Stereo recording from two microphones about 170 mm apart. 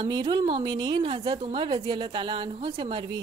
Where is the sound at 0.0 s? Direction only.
25° right (ahead or behind).